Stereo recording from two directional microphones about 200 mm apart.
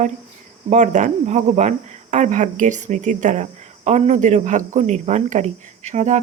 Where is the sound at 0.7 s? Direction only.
40° right (ahead or behind).